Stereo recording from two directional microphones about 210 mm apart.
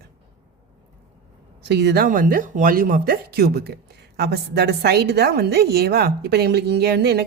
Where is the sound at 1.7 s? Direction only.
55° right (ahead or behind).